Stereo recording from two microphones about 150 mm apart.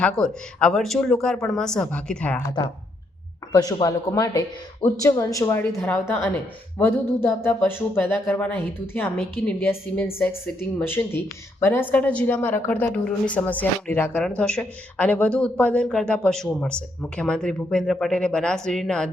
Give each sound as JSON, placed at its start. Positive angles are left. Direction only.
{"t": 0.0, "sound": "speech", "side_deg": 5}
{"t": 3.5, "sound": "a woman's voice", "side_deg": 25}